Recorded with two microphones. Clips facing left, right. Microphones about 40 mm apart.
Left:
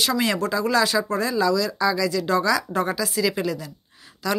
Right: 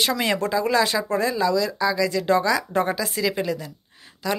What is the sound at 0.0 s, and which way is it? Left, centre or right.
A woman's voice, right.